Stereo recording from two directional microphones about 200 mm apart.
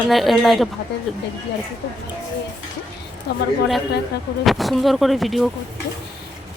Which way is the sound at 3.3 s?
55° left (ahead or behind).